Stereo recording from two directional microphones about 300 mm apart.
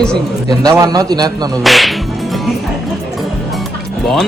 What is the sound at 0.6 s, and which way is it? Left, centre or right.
Speech, centre.